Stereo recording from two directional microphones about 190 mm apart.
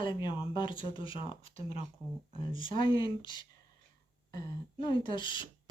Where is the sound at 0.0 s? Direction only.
25° left (ahead or behind).